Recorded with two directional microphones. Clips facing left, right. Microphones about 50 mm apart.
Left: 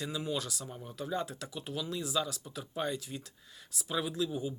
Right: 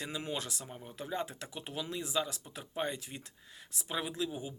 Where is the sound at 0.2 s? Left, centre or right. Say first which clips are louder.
Left 3 dB; right.